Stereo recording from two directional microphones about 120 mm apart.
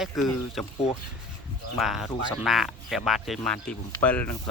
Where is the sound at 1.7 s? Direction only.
Centre (ahead or behind).